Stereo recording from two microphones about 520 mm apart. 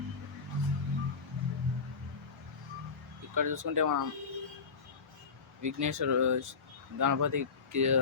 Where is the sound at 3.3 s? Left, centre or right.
Right.